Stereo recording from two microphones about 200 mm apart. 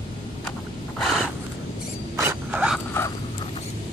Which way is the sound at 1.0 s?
Centre (ahead or behind).